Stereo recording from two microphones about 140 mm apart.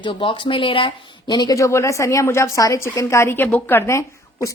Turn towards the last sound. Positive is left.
turn(degrees=20)  # may be behind; listen again after turning